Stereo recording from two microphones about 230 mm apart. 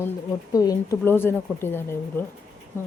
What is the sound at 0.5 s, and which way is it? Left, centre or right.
Speech, centre.